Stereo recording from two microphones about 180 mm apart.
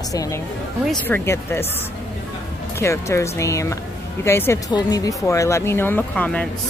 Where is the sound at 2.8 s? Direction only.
15° left (ahead or behind).